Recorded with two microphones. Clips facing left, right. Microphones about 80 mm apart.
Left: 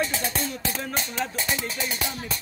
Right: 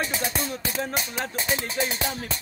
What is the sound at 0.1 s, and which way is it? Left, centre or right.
Music, centre.